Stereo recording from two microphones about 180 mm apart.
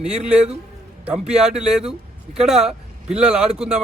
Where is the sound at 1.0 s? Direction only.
5° right (ahead or behind).